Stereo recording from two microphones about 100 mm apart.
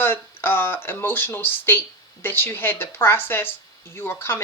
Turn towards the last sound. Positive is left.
turn(degrees=25)  # may be behind; listen again after turning